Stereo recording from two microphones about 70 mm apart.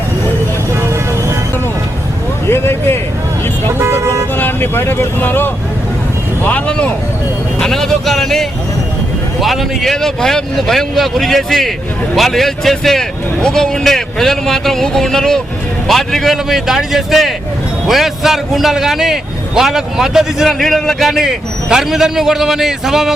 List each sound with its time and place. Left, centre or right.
2.5 s a sound: left
3.7 s vehicle: right
4.4 s speech: left
6.4 s speech: centre
7.6 s a man's voice: centre
21.7 s speech: centre